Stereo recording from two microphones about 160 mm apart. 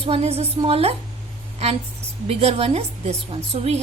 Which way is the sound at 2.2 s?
40° right (ahead or behind).